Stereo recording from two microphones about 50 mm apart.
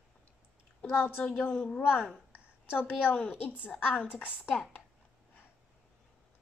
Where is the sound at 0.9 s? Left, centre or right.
Left.